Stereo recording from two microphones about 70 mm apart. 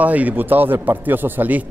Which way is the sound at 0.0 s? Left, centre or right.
Right.